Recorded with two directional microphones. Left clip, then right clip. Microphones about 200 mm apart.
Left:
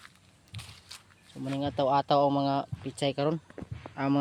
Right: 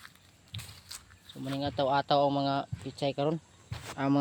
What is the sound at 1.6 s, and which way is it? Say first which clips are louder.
Speech: left 2 dB; 25° left (ahead or behind).